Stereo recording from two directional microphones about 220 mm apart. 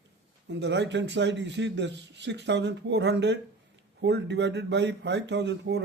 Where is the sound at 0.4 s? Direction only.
55° right (ahead or behind).